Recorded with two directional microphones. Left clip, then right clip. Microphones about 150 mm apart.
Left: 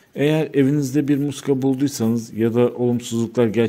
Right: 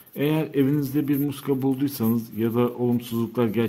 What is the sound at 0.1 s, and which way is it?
Speech, 30° left (ahead or behind).